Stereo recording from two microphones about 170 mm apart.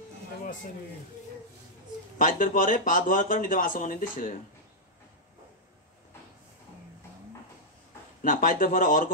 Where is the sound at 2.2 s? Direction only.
55° left (ahead or behind).